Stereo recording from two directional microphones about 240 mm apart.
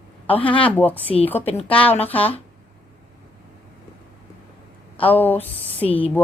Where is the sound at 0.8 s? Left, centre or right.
Centre.